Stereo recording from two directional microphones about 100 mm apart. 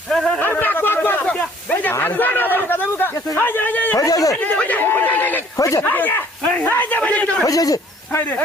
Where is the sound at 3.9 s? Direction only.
35° left (ahead or behind).